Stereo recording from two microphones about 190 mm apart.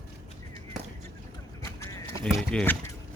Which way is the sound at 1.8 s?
15° left (ahead or behind).